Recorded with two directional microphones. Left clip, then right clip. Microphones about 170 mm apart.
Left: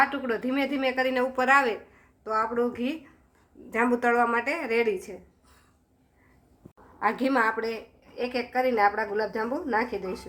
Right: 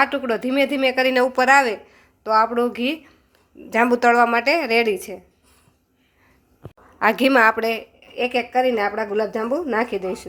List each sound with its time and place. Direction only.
0.0 s a woman's voice: 60° right (ahead or behind)
7.0 s a woman's voice: 65° right (ahead or behind)